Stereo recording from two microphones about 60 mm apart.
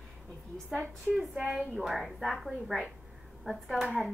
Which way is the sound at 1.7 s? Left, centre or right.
Centre.